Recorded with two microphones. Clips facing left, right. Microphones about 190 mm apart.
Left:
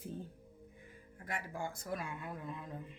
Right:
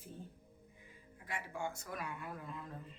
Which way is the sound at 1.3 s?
35° left (ahead or behind).